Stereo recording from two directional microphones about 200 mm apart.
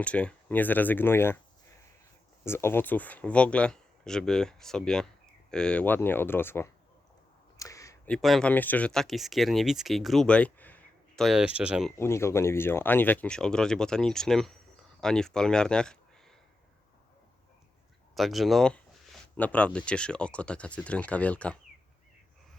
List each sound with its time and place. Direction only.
0.0 s speech: 5° left (ahead or behind)
2.4 s speech: 10° left (ahead or behind)
7.6 s a sound: 15° left (ahead or behind)
8.1 s speech: centre (ahead or behind)
11.9 s speech: 15° left (ahead or behind)
18.1 s speech: centre (ahead or behind)